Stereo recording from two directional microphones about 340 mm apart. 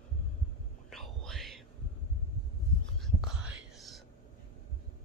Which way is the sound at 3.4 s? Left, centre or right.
Centre.